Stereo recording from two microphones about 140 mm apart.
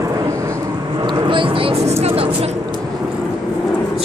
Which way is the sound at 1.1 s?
35° right (ahead or behind).